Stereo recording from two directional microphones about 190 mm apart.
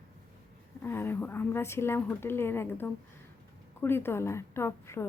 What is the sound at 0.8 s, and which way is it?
A woman's voice, 10° left (ahead or behind).